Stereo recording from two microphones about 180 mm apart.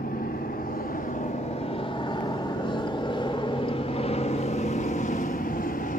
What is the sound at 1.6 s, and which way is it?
Vehicle, 30° left (ahead or behind).